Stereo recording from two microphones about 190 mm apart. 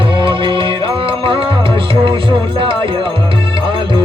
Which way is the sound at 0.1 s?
25° right (ahead or behind).